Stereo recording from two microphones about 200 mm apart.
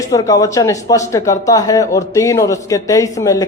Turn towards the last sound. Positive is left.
turn(degrees=15)  # may be behind; listen again after turning